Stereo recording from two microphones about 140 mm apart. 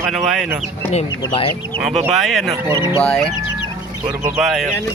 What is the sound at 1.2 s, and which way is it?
Speech, 40° left (ahead or behind).